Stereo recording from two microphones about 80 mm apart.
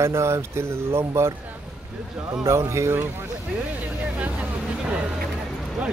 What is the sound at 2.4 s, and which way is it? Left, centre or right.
Speech, right.